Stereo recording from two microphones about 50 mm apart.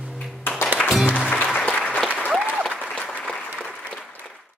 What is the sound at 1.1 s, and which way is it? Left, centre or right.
Music, left.